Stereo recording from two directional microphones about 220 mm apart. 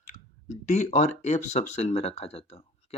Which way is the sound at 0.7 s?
30° left (ahead or behind).